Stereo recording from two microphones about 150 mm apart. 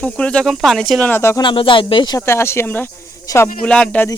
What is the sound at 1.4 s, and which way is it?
Speech, 35° left (ahead or behind).